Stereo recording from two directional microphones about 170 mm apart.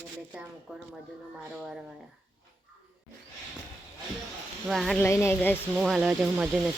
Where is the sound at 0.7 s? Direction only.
5° right (ahead or behind).